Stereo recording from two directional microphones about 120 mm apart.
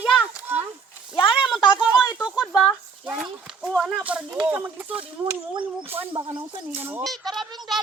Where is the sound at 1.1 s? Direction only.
45° left (ahead or behind).